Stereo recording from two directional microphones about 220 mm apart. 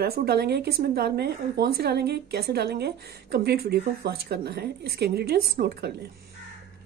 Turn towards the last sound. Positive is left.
turn(degrees=-45)  # may be behind; listen again after turning